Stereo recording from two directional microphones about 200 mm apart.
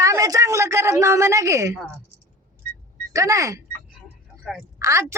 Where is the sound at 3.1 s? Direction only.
15° right (ahead or behind).